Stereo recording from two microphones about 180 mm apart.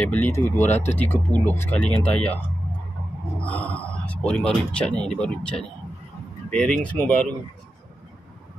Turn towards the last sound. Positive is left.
turn(degrees=10)  # may be behind; listen again after turning